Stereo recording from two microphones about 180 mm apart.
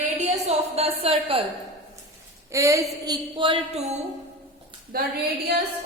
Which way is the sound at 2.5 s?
15° right (ahead or behind).